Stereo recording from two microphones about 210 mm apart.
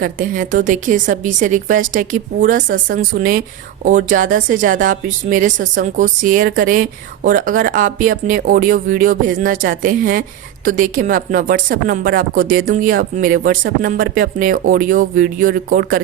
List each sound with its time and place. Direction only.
0.0 s speech: 40° right (ahead or behind)